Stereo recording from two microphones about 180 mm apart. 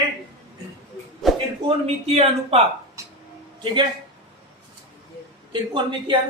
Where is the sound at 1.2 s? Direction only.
Centre (ahead or behind).